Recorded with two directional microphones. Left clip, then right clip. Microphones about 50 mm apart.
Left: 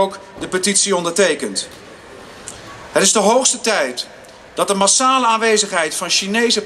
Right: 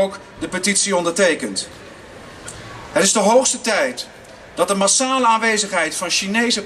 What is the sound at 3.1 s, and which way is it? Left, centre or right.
A man's voice, left.